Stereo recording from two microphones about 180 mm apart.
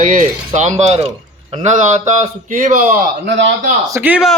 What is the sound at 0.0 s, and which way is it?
A man's voice, 45° right (ahead or behind).